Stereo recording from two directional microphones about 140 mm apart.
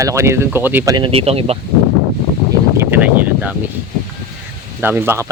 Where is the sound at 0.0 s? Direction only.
20° right (ahead or behind).